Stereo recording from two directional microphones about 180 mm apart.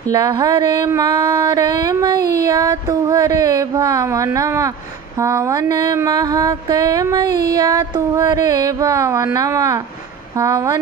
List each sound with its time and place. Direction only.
0.1 s mantra: 20° right (ahead or behind)